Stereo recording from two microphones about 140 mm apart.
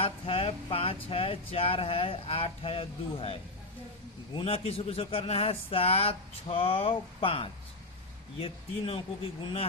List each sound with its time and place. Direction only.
0.0 s speech: 40° left (ahead or behind)
4.4 s speech: 45° left (ahead or behind)